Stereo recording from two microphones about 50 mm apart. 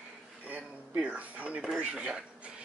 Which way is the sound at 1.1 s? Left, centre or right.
Right.